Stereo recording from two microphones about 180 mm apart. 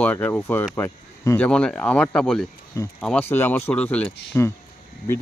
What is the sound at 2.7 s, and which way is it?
Speech, 15° left (ahead or behind).